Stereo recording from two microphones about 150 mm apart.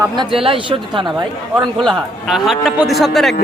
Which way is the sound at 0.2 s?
35° right (ahead or behind).